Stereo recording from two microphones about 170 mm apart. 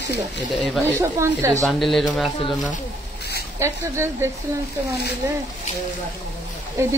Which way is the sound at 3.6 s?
15° right (ahead or behind).